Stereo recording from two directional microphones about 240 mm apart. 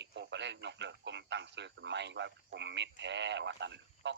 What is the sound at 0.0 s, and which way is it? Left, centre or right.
Speech, right.